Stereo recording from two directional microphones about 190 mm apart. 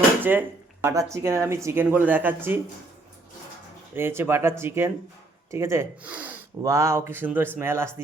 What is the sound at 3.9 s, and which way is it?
Speech, 10° right (ahead or behind).